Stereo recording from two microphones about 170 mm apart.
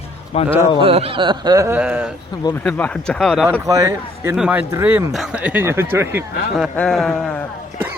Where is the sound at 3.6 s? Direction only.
20° right (ahead or behind).